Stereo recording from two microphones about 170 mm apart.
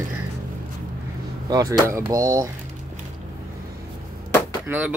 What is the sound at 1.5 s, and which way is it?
Speech, 20° right (ahead or behind).